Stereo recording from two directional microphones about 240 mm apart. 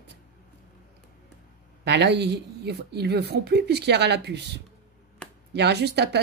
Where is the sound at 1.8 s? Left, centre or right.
Right.